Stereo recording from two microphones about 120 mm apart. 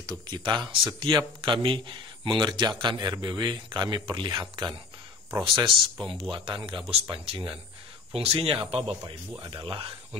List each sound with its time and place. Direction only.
0.0 s a man's voice: 35° right (ahead or behind)